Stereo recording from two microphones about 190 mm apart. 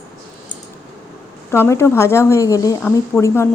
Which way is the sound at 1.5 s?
15° left (ahead or behind).